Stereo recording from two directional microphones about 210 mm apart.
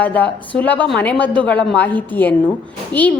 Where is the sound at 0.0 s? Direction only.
5° left (ahead or behind).